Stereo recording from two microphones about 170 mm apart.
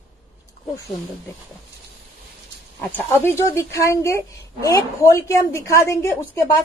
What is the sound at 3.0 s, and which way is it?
A woman's voice, 15° left (ahead or behind).